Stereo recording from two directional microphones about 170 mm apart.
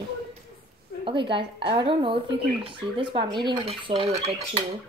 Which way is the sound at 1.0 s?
30° right (ahead or behind).